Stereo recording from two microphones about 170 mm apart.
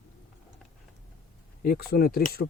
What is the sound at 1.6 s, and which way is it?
Speech, 60° left (ahead or behind).